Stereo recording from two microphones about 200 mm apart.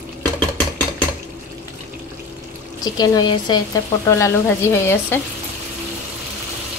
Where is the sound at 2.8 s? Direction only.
20° left (ahead or behind).